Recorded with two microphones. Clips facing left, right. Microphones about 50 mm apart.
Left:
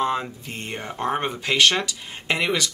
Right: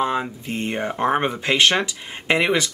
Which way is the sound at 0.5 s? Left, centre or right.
Right.